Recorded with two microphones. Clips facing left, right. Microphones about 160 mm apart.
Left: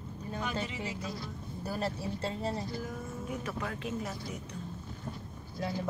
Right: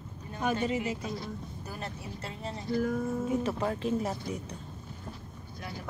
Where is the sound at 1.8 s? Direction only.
30° left (ahead or behind).